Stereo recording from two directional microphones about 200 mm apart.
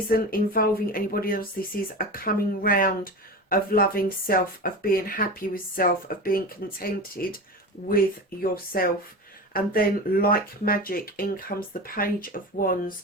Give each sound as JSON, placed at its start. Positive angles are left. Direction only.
{"t": 0.1, "sound": "speech", "side_deg": 45}
{"t": 8.4, "sound": "speech", "side_deg": 45}